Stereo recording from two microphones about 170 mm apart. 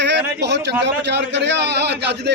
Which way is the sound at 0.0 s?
90° right.